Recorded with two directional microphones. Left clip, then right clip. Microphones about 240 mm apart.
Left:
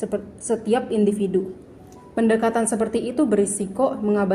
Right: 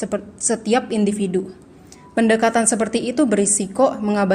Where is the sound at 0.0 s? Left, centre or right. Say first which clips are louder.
Right 3 dB; right.